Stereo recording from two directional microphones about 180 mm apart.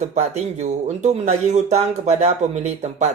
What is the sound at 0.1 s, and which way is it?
A man's voice, 40° right (ahead or behind).